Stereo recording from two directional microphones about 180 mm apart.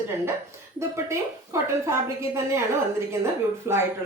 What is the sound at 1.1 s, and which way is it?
Speech, 15° right (ahead or behind).